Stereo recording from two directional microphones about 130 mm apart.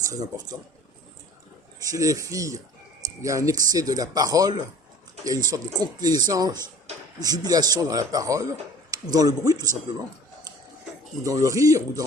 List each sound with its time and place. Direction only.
1.8 s speech: 25° right (ahead or behind)
11.2 s speech: 25° right (ahead or behind)